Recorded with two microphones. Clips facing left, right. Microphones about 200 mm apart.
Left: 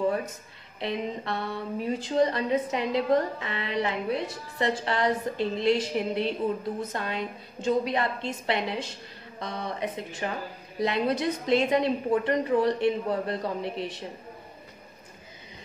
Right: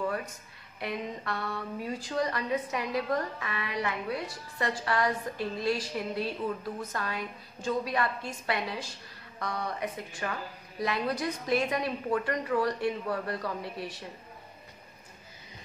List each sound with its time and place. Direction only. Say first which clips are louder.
0.0 s a woman's voice: left 6 dB; 25° left (ahead or behind)